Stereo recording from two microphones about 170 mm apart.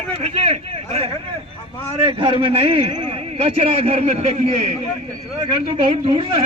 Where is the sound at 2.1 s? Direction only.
30° right (ahead or behind).